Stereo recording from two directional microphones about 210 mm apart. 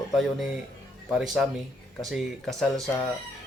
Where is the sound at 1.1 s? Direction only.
5° right (ahead or behind).